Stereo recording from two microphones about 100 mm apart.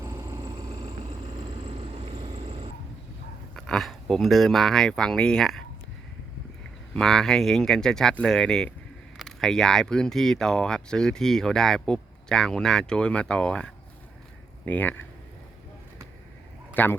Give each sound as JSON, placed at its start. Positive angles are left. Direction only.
{"t": 0.0, "sound": "vehicle", "side_deg": -25}
{"t": 0.3, "sound": "vehicle", "side_deg": -40}
{"t": 0.9, "sound": "vehicle", "side_deg": -90}
{"t": 1.4, "sound": "vehicle", "side_deg": -60}
{"t": 3.5, "sound": "speech", "side_deg": 5}
{"t": 6.9, "sound": "speech", "side_deg": 5}
{"t": 16.7, "sound": "speech", "side_deg": 20}